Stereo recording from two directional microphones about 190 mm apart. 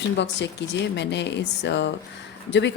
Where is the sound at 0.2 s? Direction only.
65° left (ahead or behind).